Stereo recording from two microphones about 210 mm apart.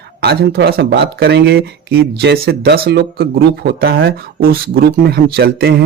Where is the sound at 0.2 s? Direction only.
50° right (ahead or behind).